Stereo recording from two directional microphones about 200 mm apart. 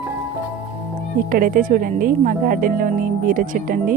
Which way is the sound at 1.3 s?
45° right (ahead or behind).